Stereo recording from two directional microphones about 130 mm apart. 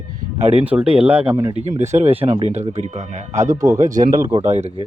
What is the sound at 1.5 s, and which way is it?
Speech, 60° right (ahead or behind).